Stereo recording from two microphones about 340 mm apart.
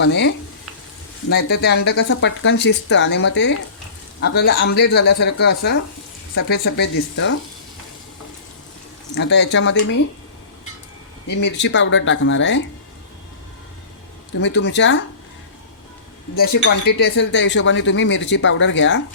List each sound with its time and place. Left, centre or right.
0.0 s speech: left
9.1 s speech: left
11.3 s speech: left
14.3 s speech: left
16.3 s speech: left